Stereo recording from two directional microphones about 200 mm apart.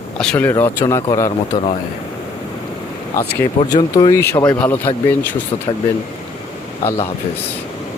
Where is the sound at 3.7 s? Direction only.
20° left (ahead or behind).